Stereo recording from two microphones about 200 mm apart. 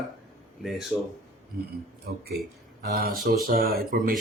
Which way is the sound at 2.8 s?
55° right (ahead or behind).